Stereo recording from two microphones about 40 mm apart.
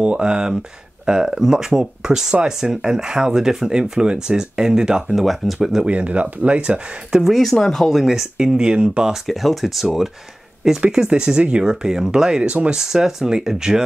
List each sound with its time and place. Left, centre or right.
0.0 s speech: right
5.1 s speech: centre
5.9 s speech: right
7.5 s speech: centre
7.8 s speech: centre; by 9.1 s right
9.1 s speech: centre
11.1 s speech: right